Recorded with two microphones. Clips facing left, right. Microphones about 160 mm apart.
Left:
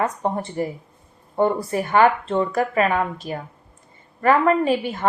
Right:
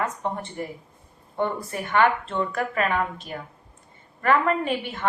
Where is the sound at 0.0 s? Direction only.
35° left (ahead or behind).